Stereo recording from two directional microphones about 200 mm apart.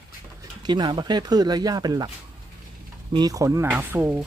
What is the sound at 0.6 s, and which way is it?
Speech, 20° right (ahead or behind).